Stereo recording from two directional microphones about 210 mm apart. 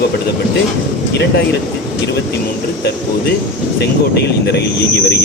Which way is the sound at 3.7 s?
50° left (ahead or behind).